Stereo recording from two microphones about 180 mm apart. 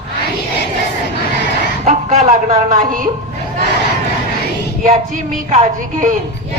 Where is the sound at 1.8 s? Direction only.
40° right (ahead or behind).